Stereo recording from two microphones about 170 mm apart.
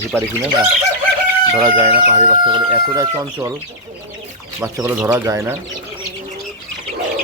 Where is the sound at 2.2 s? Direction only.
25° right (ahead or behind).